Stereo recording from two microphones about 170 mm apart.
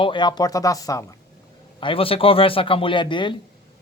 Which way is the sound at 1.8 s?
30° left (ahead or behind).